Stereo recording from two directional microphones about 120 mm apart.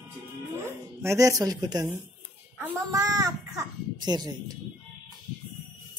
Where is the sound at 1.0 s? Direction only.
25° right (ahead or behind).